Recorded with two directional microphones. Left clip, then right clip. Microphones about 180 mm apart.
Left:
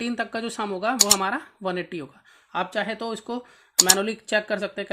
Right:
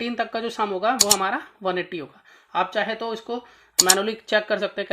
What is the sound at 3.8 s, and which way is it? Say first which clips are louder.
Speech: right 1 dB; centre (ahead or behind).